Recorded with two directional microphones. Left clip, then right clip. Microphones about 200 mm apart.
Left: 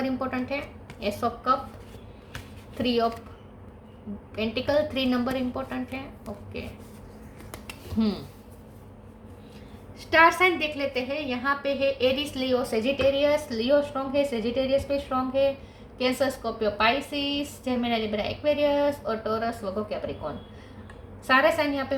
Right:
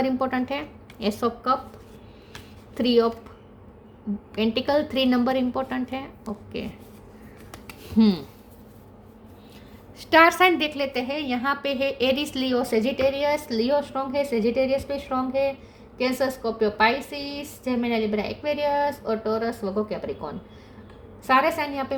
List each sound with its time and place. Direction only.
0.0 s a woman's voice: 45° right (ahead or behind)
2.7 s a woman's voice: 45° right (ahead or behind)
4.4 s a woman's voice: 45° right (ahead or behind)
7.9 s a woman's voice: 50° right (ahead or behind)
10.0 s a woman's voice: 55° right (ahead or behind)